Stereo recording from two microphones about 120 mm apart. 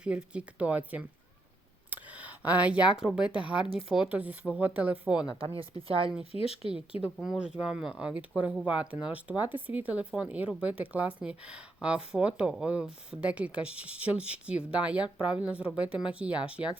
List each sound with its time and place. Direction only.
0.0 s speech: 10° right (ahead or behind)
5.4 s speech: 50° right (ahead or behind)
6.3 s speech: 55° left (ahead or behind)
6.7 s speech: 10° right (ahead or behind)